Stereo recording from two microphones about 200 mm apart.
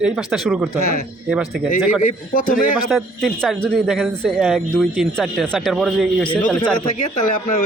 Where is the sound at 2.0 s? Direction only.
40° left (ahead or behind).